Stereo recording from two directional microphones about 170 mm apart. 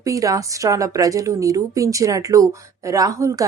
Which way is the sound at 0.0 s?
20° right (ahead or behind).